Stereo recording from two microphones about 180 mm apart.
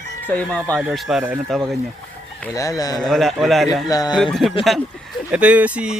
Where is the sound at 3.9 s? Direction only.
20° left (ahead or behind).